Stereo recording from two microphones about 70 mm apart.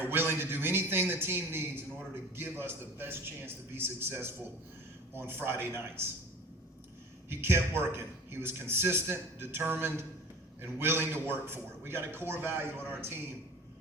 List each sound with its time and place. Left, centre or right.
0.0 s a man's voice: right
7.3 s a man's voice: right